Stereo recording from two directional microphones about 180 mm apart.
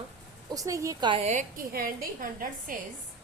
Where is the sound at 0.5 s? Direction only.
20° right (ahead or behind).